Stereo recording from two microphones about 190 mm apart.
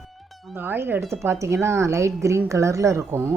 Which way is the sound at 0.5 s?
10° right (ahead or behind).